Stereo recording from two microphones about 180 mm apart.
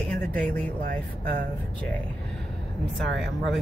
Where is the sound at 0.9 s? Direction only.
55° right (ahead or behind).